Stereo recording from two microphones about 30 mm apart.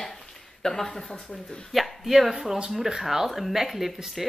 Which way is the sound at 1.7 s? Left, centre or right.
Centre.